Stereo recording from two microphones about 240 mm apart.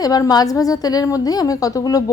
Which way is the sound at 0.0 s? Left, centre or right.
Centre.